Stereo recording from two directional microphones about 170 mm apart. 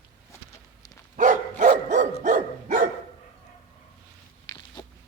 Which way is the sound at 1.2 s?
45° right (ahead or behind).